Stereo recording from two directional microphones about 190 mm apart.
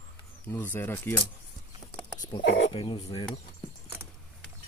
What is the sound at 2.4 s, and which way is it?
Speech, 65° left (ahead or behind).